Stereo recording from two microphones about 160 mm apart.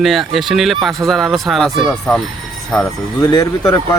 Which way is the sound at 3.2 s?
25° left (ahead or behind).